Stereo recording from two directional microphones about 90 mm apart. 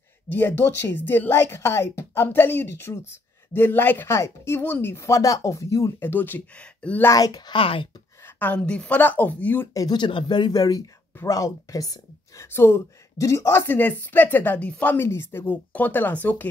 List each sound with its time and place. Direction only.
0.3 s a woman's voice: 25° left (ahead or behind)
5.9 s a woman's voice: 20° left (ahead or behind)
7.1 s speech: 45° left (ahead or behind)
7.5 s speech: 75° left (ahead or behind)
8.4 s a woman's voice: 15° left (ahead or behind)
9.8 s a woman's voice: 55° left (ahead or behind)
12.4 s a woman's voice: 25° left (ahead or behind)
15.0 s a woman's voice: 25° left (ahead or behind)